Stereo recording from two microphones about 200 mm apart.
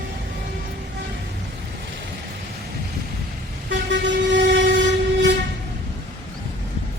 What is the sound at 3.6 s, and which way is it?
Vehicle, 65° right (ahead or behind).